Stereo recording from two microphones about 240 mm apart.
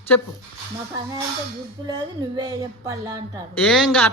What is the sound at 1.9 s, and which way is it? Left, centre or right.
Speech, centre.